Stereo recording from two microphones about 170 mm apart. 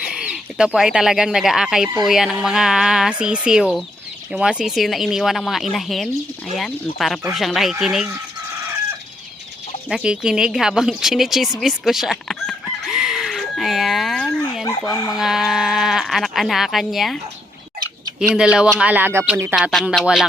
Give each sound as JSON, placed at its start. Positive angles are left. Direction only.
{"t": 0.0, "sound": "speech", "side_deg": -5}
{"t": 9.9, "sound": "speech", "side_deg": -5}
{"t": 11.6, "sound": "chicken", "side_deg": 0}
{"t": 14.6, "sound": "speech", "side_deg": 20}
{"t": 15.2, "sound": "speech", "side_deg": 0}
{"t": 18.3, "sound": "speech", "side_deg": -5}